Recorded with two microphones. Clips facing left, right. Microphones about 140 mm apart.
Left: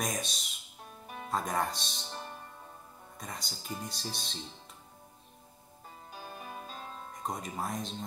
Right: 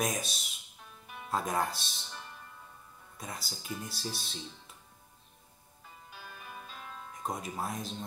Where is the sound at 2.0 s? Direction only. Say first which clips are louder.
Left 5 dB; 35° left (ahead or behind).